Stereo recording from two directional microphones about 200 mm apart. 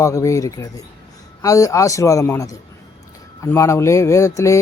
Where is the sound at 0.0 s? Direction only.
15° left (ahead or behind).